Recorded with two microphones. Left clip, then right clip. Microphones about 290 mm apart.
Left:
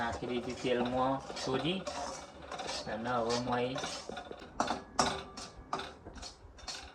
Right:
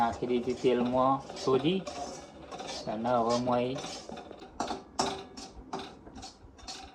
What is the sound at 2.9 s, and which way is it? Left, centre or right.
Speech, centre.